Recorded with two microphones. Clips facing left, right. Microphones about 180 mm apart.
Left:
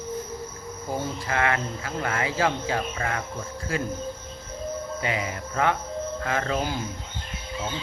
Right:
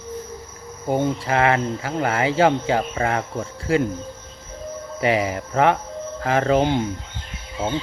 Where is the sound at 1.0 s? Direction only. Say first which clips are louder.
Right 7 dB; 25° right (ahead or behind).